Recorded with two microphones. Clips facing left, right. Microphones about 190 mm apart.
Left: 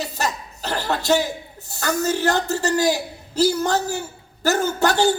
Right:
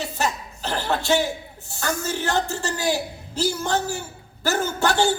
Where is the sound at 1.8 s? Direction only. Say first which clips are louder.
Left 5 dB; 40° left (ahead or behind).